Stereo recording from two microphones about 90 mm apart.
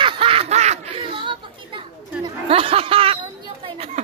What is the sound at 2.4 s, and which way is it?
Speech, 90° right.